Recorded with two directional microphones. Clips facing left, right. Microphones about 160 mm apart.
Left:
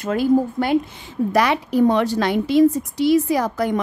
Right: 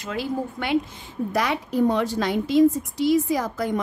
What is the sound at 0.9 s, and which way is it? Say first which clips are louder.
A woman's voice: left 6 dB; 80° left.